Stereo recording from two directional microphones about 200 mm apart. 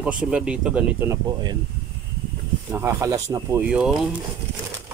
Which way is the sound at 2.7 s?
15° right (ahead or behind).